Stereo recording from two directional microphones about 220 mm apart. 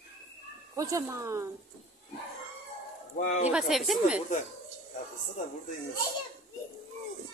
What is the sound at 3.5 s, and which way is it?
Speech, 5° right (ahead or behind).